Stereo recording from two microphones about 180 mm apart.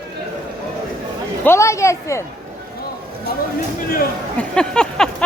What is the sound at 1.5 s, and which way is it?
Speech, 15° left (ahead or behind).